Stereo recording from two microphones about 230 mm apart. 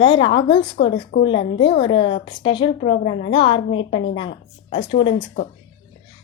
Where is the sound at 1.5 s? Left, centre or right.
Left.